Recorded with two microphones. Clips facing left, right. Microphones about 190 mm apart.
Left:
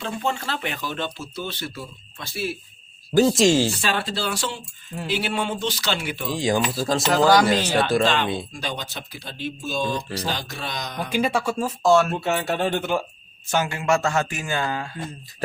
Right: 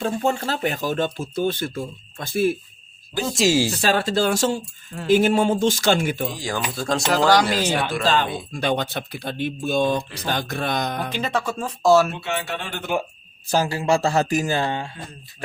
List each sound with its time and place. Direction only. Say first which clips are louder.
0.0 s speech: right 5 dB; 45° right (ahead or behind)
3.3 s speech: left 1 dB; 5° right (ahead or behind)
3.8 s speech: right 6 dB; 40° right (ahead or behind)
6.3 s speech: left 6 dB; 20° left (ahead or behind)
6.7 s speech: left 1 dB; centre (ahead or behind)
7.6 s speech: left 1 dB; 15° right (ahead or behind)
8.0 s speech: right 1 dB; 40° right (ahead or behind)
8.6 s speech: right 8 dB; 60° right (ahead or behind)
11.1 s speech: left 2 dB; 10° left (ahead or behind)
12.1 s speech: left 4 dB; 40° left (ahead or behind)
13.5 s speech: right 2 dB; 35° right (ahead or behind)